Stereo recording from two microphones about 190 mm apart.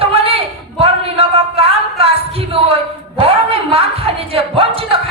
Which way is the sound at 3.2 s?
30° right (ahead or behind).